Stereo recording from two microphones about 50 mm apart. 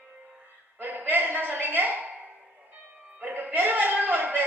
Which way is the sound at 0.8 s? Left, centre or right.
Right.